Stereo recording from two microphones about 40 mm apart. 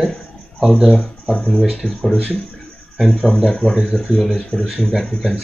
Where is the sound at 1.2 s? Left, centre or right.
Centre.